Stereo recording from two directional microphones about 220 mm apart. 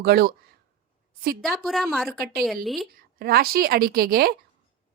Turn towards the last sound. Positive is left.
turn(degrees=-45)  # may be behind; listen again after turning